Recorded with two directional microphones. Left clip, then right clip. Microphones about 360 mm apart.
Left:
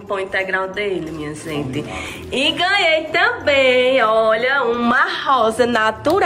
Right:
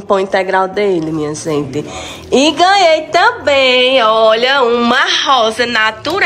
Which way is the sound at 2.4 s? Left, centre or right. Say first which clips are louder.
Right 7 dB; centre.